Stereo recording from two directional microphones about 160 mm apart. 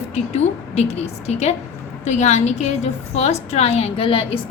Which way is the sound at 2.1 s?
45° left (ahead or behind).